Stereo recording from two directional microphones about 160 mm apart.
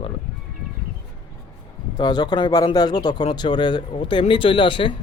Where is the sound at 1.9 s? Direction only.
25° left (ahead or behind).